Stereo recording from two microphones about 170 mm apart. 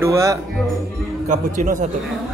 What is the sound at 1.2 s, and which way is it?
Speech, 50° right (ahead or behind).